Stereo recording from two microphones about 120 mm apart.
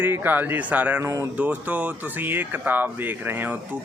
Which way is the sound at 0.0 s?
15° right (ahead or behind).